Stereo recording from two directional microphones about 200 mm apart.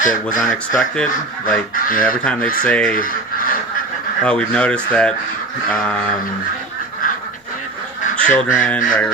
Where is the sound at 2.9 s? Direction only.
45° left (ahead or behind).